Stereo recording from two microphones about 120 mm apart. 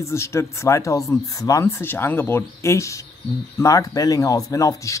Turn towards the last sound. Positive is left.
turn(degrees=25)  # may be behind; listen again after turning